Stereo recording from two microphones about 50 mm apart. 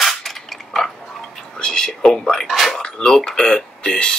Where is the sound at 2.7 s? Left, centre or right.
Centre.